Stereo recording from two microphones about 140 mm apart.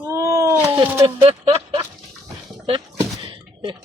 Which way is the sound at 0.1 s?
20° right (ahead or behind).